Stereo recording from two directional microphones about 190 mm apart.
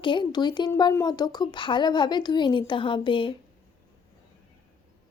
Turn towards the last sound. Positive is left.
turn(degrees=25)  # may be behind; listen again after turning